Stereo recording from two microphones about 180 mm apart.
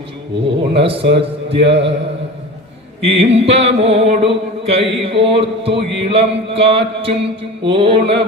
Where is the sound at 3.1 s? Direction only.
35° right (ahead or behind).